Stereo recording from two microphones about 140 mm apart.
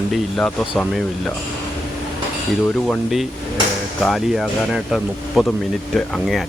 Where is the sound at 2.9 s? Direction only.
Centre (ahead or behind).